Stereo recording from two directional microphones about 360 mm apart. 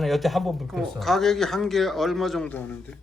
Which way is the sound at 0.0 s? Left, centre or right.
Centre.